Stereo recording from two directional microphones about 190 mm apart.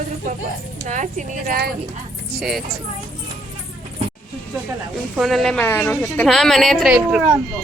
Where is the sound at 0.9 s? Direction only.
40° right (ahead or behind).